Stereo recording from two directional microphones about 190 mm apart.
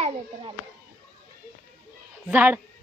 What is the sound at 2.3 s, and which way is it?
Speech, 10° right (ahead or behind).